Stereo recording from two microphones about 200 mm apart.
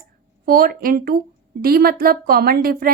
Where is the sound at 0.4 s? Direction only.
45° right (ahead or behind).